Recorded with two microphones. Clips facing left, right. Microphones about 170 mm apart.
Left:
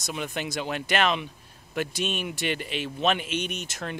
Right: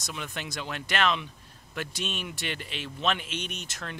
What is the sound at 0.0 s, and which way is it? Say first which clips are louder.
Speech: left 6 dB; 15° left (ahead or behind).